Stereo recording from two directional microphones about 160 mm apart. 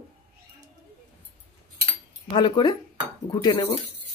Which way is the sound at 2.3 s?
30° left (ahead or behind).